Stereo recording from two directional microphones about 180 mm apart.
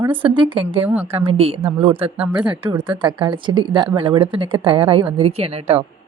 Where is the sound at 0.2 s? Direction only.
30° right (ahead or behind).